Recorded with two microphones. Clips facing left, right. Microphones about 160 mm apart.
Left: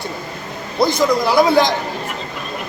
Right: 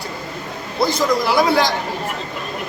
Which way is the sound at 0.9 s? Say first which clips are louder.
Left 1 dB; 15° left (ahead or behind).